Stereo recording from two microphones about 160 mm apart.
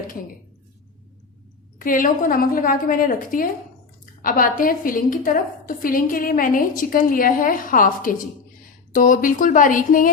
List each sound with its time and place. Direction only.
1.8 s a woman's voice: 60° left (ahead or behind)